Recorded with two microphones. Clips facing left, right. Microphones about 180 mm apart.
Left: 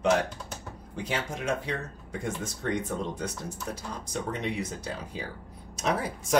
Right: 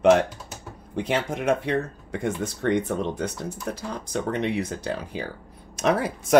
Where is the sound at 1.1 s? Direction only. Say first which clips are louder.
Right 7 dB; 60° right (ahead or behind).